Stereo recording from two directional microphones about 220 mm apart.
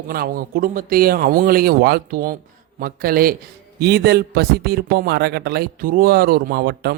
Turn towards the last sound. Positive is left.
turn(degrees=-45)  # may be behind; listen again after turning